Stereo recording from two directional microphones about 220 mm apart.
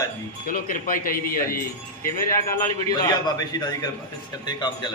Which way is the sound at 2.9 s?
15° left (ahead or behind).